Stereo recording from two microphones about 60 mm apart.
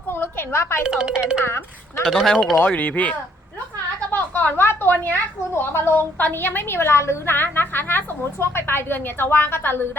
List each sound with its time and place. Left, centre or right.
0.1 s a sound: left
0.9 s speech: centre
1.4 s speech: left
2.0 s speech: centre
2.6 s speech: left
4.1 s a sound: left
4.6 s a woman's voice: left
7.3 s a woman's voice: left